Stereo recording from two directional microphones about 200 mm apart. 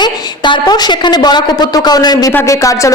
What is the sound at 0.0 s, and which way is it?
A woman's voice, 20° left (ahead or behind).